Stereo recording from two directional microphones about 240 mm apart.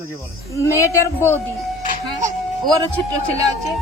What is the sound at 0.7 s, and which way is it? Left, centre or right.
Speech, centre.